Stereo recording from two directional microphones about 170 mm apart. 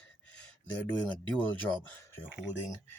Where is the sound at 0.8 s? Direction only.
10° left (ahead or behind).